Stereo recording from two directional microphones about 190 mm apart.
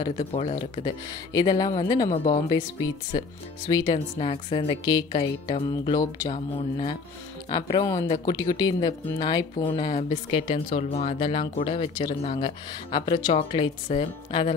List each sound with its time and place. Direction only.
0.0 s speech: 30° left (ahead or behind)
2.1 s speech: 30° left (ahead or behind)
7.4 s speech: 25° left (ahead or behind)